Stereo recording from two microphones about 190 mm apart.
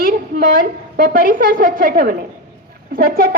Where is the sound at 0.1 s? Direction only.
50° right (ahead or behind).